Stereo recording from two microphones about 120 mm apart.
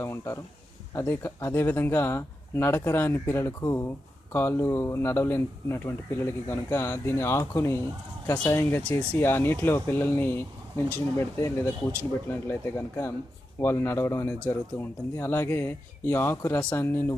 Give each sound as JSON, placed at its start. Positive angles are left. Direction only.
{"t": 0.0, "sound": "speech", "side_deg": 20}